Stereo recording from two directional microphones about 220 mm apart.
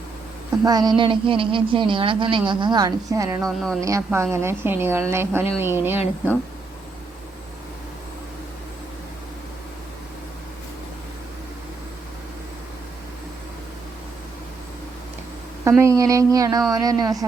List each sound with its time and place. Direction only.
0.6 s a woman's voice: 20° right (ahead or behind)
3.4 s speech: centre (ahead or behind)
3.8 s a woman's voice: 15° right (ahead or behind)
15.8 s a woman's voice: 15° right (ahead or behind)